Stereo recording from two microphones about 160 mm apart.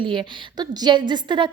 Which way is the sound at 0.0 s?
30° right (ahead or behind).